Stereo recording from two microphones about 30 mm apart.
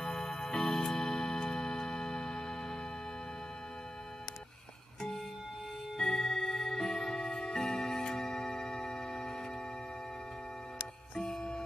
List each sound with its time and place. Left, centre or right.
0.0 s music: centre
5.9 s music: centre
11.1 s music: left